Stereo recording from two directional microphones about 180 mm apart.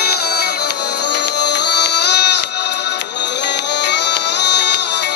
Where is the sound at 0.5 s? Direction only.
65° left (ahead or behind).